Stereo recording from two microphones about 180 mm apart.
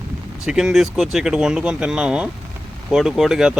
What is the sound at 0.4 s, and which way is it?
Speech, 5° right (ahead or behind).